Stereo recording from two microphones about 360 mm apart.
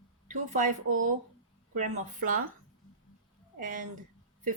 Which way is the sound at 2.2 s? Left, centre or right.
Right.